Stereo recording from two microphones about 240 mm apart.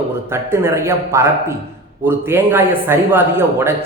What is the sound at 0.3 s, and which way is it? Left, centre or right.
A man's voice, centre.